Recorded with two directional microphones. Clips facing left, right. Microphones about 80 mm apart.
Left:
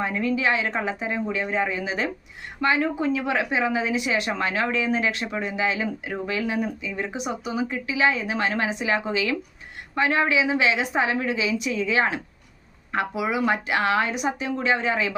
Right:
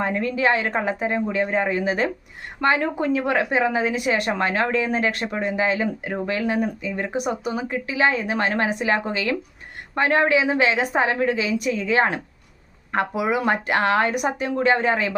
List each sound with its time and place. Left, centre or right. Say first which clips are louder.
0.0 s a woman's voice: right 2 dB; right